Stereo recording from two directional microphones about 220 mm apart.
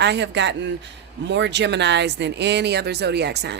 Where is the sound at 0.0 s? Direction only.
50° right (ahead or behind).